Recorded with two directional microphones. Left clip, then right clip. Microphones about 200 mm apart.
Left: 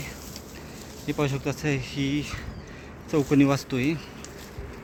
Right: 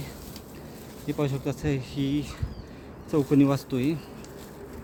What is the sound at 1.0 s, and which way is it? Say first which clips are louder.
Speech: left 2 dB; 5° left (ahead or behind).